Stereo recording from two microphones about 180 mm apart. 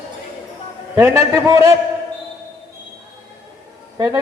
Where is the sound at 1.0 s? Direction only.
15° right (ahead or behind).